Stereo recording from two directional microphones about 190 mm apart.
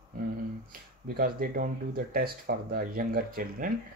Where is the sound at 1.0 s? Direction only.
50° right (ahead or behind).